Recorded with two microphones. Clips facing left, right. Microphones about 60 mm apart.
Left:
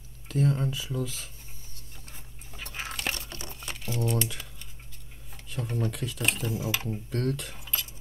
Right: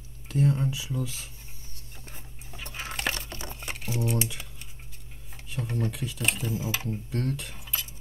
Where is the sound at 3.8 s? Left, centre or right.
Centre.